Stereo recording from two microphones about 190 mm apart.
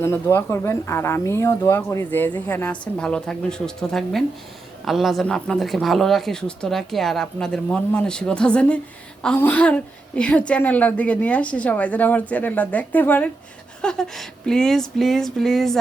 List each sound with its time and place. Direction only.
0.0 s speech: 15° left (ahead or behind)